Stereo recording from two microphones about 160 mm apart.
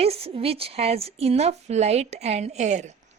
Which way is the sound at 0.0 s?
40° right (ahead or behind).